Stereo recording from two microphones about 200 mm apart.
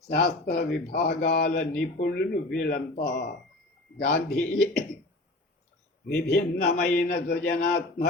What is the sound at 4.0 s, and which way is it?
Speech, 55° left (ahead or behind).